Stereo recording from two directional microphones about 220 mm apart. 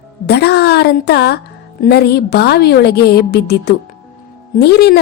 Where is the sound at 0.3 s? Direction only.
45° left (ahead or behind).